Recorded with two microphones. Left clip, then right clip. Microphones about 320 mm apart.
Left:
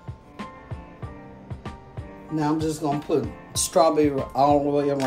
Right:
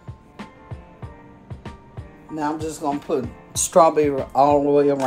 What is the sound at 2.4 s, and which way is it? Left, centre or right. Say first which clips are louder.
Speech: left 1 dB; centre.